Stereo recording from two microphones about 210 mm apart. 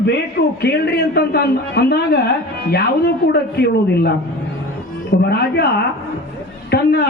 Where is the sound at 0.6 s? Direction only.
50° left (ahead or behind).